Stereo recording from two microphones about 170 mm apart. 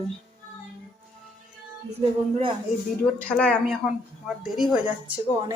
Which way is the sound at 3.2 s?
5° left (ahead or behind).